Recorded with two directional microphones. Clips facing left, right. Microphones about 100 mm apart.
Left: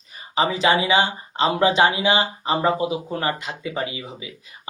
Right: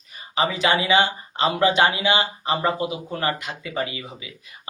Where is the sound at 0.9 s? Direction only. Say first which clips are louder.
Even; 25° left (ahead or behind).